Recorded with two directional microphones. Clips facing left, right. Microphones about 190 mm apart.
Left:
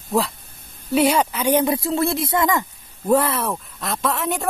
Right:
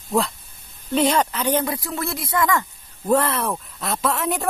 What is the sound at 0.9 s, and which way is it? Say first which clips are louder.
Speech: left 2 dB; 10° left (ahead or behind).